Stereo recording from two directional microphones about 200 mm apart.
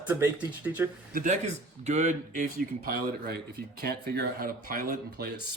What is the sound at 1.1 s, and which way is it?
A man's voice, 45° right (ahead or behind).